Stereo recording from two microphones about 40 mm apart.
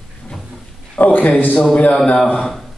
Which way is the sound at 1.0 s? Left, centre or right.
Left.